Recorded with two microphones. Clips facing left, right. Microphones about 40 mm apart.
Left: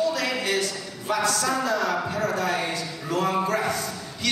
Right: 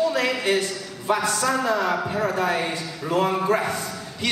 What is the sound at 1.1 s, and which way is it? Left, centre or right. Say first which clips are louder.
A man's voice: even; centre.